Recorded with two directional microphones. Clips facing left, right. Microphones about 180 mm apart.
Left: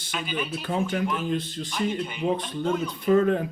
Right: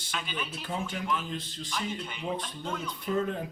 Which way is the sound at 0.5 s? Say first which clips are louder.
Left 9 dB; 65° left (ahead or behind).